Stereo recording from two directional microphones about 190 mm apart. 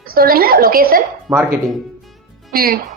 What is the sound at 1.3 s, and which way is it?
Speech, 15° right (ahead or behind).